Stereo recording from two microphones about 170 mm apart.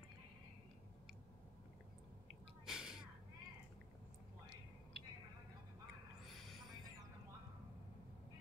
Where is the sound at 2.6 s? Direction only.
5° right (ahead or behind).